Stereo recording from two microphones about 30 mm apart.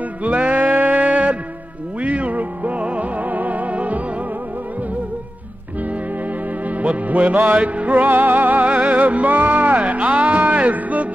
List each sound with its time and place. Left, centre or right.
0.2 s music: right
2.8 s music: right
3.2 s music: right
6.6 s music: right
7.9 s music: right
8.6 s music: right